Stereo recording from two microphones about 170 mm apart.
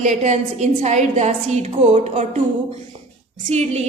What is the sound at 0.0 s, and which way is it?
A woman's voice, 45° right (ahead or behind).